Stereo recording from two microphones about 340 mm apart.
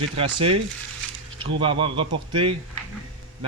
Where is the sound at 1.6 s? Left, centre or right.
Centre.